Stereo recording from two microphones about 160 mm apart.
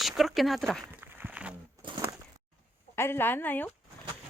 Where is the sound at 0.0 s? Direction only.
Centre (ahead or behind).